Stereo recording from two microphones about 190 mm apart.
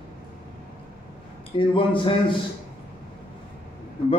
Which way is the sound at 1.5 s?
25° left (ahead or behind).